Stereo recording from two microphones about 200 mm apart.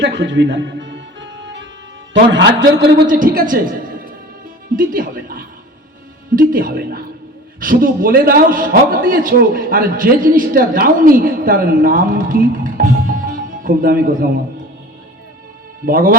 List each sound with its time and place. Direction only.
0.0 s music: 65° right (ahead or behind)
2.1 s a man's voice: 60° right (ahead or behind)
3.1 s a man's voice: 45° right (ahead or behind)
4.8 s a man's voice: 45° right (ahead or behind)
15.9 s a man's voice: 45° right (ahead or behind)